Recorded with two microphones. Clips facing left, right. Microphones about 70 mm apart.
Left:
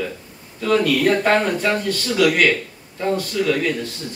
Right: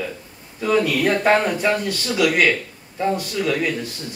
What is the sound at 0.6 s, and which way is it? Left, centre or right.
Speech, centre.